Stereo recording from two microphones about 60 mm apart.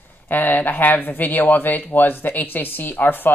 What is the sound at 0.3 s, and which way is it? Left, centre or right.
Speech, left.